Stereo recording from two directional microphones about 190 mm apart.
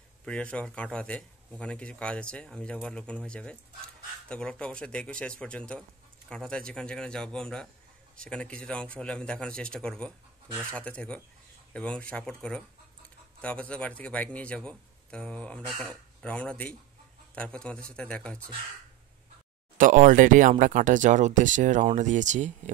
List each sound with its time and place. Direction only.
0.2 s speech: 5° left (ahead or behind)
19.8 s speech: 45° right (ahead or behind)